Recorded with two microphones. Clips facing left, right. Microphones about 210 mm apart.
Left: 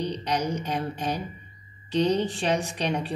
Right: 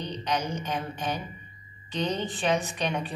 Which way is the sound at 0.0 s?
35° left (ahead or behind).